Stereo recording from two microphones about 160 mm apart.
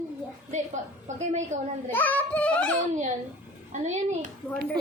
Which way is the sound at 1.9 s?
10° left (ahead or behind).